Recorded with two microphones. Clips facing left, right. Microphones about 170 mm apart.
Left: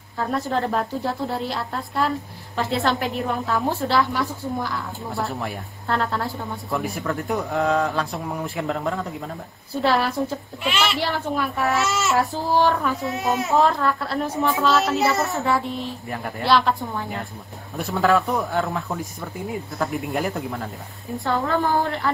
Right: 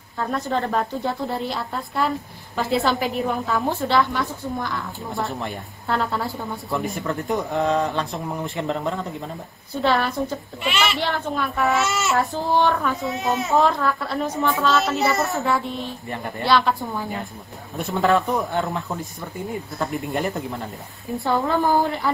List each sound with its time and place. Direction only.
0.2 s a child's voice: centre (ahead or behind)
21.3 s a woman's voice: 15° right (ahead or behind)